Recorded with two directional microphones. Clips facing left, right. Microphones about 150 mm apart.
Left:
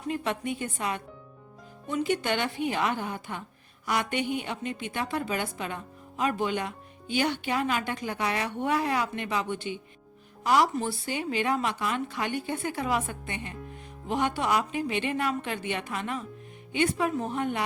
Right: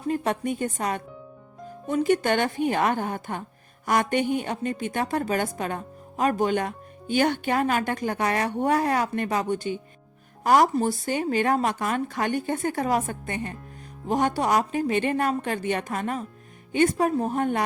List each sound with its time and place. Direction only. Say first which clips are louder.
0.1 s a woman's voice: right 5 dB; 45° right (ahead or behind)